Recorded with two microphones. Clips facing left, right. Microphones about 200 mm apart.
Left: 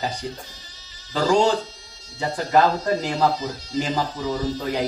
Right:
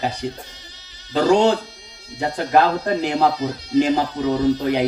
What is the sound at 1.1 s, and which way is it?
Speech, 60° right (ahead or behind).